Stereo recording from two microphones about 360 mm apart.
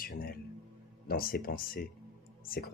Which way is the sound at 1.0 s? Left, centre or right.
Left.